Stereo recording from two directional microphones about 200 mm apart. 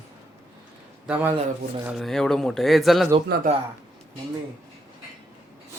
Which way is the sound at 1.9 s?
Centre (ahead or behind).